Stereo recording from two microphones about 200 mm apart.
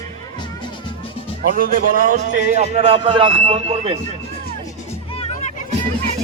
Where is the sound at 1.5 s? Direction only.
45° right (ahead or behind); by 3.9 s 30° right (ahead or behind).